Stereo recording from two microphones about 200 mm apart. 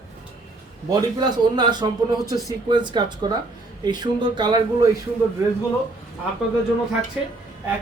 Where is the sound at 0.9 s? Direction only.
20° right (ahead or behind).